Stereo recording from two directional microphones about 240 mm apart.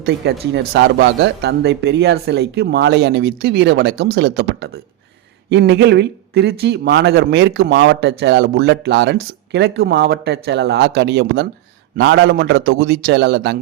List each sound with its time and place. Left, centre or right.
0.0 s speech: right